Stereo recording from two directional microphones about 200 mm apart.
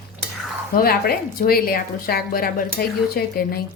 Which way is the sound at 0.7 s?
50° left (ahead or behind).